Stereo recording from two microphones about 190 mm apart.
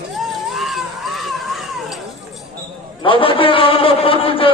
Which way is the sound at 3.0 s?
25° left (ahead or behind).